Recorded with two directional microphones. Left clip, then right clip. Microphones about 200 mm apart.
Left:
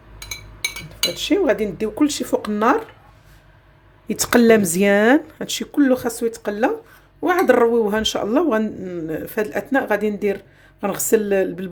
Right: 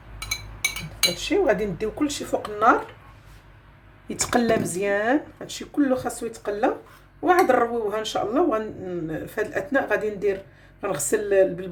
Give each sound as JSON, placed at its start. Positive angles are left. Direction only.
{"t": 1.1, "sound": "speech", "side_deg": 50}
{"t": 4.1, "sound": "speech", "side_deg": 35}